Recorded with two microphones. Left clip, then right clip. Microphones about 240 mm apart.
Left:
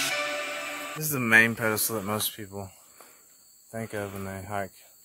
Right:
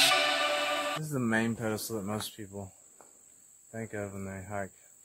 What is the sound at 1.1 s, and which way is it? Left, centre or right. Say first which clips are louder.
Speech: left 14 dB; left.